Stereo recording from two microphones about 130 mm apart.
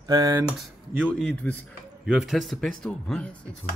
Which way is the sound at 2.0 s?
5° right (ahead or behind).